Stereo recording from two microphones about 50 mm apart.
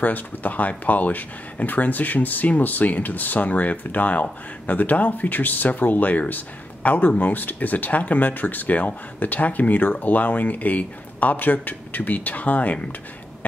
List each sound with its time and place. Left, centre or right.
0.0 s speech: left